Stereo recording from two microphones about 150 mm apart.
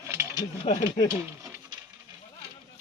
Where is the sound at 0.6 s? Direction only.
40° left (ahead or behind).